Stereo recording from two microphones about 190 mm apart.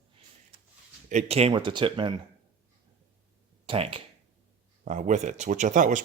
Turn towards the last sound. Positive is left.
turn(degrees=-40)  # may be behind; listen again after turning